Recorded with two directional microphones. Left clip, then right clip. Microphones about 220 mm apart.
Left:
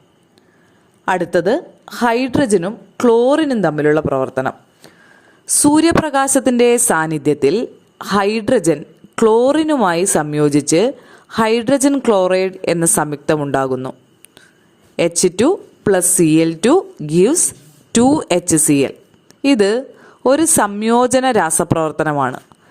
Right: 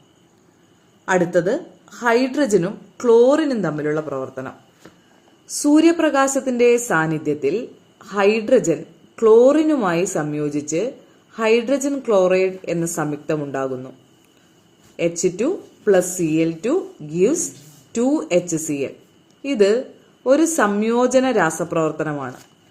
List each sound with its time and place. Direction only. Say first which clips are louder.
1.0 s a woman's voice: left 3 dB; 40° left (ahead or behind)
5.6 s a woman's voice: left 2 dB; 45° left (ahead or behind)
14.9 s a woman's voice: left 6 dB; 45° left (ahead or behind)